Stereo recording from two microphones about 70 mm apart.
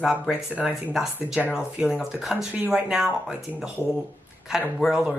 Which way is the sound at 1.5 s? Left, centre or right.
Centre.